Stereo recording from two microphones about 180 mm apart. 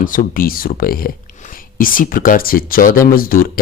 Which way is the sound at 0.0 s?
50° left (ahead or behind).